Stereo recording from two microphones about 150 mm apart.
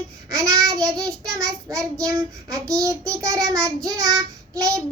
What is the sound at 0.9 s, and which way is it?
Child singing, 5° left (ahead or behind).